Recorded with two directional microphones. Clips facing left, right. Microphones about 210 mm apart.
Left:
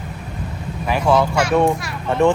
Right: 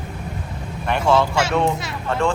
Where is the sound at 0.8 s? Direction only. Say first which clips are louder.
Left 1 dB; 5° left (ahead or behind).